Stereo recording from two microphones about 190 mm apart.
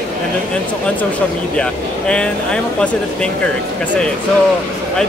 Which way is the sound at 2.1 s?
5° left (ahead or behind).